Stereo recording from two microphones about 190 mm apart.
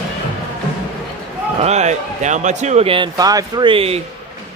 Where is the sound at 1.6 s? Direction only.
35° right (ahead or behind).